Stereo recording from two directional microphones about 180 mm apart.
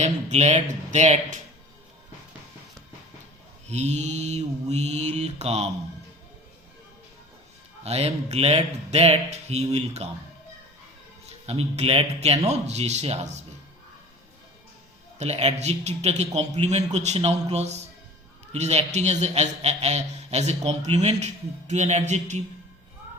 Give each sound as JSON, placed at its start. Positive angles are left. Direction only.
{"t": 0.0, "sound": "a man's voice", "side_deg": -40}
{"t": 3.7, "sound": "a man's voice", "side_deg": -40}
{"t": 7.9, "sound": "a man's voice", "side_deg": -35}
{"t": 11.3, "sound": "a man's voice", "side_deg": -35}
{"t": 15.2, "sound": "a man's voice", "side_deg": -35}